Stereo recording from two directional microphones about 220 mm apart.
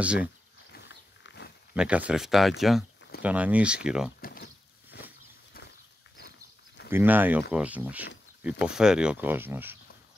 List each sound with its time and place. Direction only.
0.0 s speech: 5° right (ahead or behind)
0.7 s wild animals: 50° left (ahead or behind)
1.7 s speech: 5° right (ahead or behind)
4.2 s a sound: 45° left (ahead or behind)
6.9 s speech: 10° right (ahead or behind)